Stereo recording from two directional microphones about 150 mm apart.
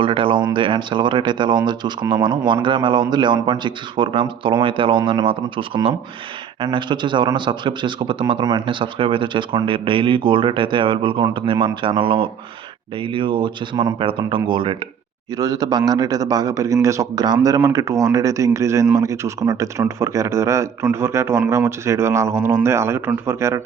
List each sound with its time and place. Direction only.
0.0 s a man's voice: 35° right (ahead or behind); by 23.6 s 20° right (ahead or behind)